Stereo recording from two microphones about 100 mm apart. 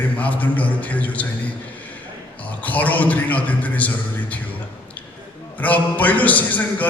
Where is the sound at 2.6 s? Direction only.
15° left (ahead or behind).